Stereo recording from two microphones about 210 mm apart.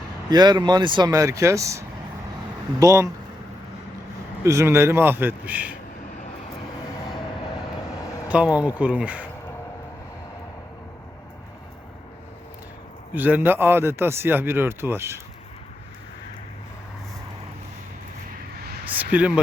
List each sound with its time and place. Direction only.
0.3 s a man's voice: 20° right (ahead or behind)
4.4 s a man's voice: 15° right (ahead or behind)
8.5 s a man's voice: 5° right (ahead or behind)
13.1 s a man's voice: 10° right (ahead or behind)
18.9 s a sound: 5° right (ahead or behind)